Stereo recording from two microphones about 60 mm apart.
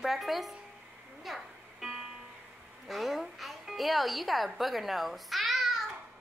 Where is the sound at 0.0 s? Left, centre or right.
Centre.